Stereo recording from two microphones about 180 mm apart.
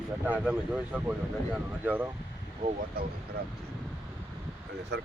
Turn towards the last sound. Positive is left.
turn(degrees=-70)  # may be behind; listen again after turning